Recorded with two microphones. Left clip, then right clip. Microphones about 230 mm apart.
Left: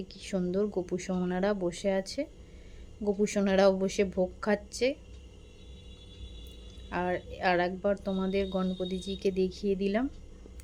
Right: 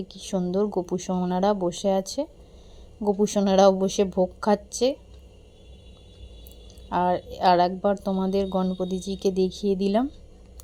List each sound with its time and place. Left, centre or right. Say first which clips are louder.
0.1 s a woman's voice: right 5 dB; centre
6.9 s speech: right 9 dB; centre